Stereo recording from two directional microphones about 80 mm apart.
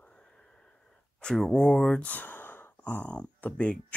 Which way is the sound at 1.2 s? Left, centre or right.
Centre.